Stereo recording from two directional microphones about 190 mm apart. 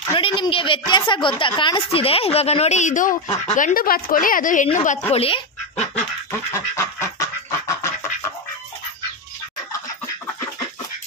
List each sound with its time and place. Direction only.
0.1 s a woman's voice: 25° left (ahead or behind)
6.3 s duck: 15° left (ahead or behind)